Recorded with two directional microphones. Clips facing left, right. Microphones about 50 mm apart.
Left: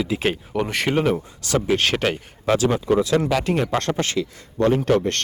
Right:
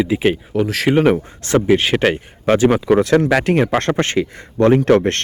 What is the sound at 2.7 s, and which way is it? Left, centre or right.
Speech, right.